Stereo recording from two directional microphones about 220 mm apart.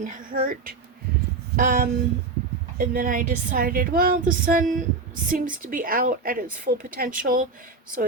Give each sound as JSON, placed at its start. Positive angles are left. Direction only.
{"t": 0.0, "sound": "a woman's voice", "side_deg": -35}